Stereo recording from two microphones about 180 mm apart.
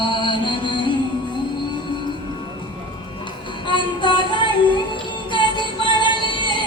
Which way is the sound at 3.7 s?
25° left (ahead or behind).